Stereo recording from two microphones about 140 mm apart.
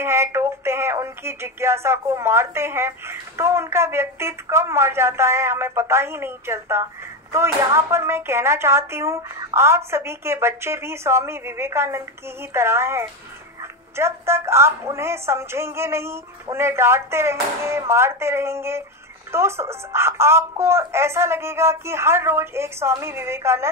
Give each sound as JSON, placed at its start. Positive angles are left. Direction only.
{"t": 0.0, "sound": "speech", "side_deg": -20}